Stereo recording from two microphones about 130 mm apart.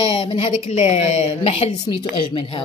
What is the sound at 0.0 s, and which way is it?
A woman's voice, 40° left (ahead or behind).